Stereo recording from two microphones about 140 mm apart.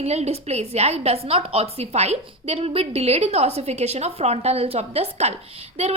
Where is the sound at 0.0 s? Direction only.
50° right (ahead or behind).